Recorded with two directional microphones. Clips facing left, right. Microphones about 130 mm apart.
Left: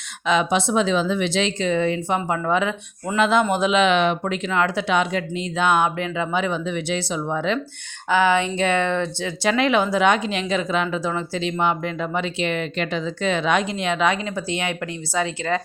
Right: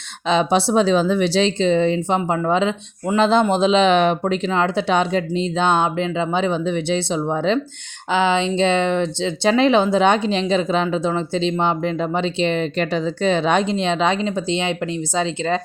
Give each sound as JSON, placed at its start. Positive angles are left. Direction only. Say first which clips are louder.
{"t": 0.3, "sound": "speech", "louder": "right 3 dB", "side_deg": -30}
{"t": 4.2, "sound": "speech", "louder": "right 3 dB", "side_deg": -25}